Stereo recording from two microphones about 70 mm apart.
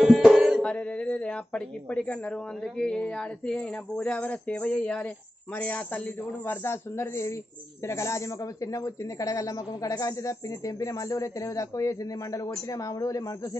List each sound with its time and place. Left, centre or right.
0.0 s music: centre
0.6 s speech: centre; by 13.6 s left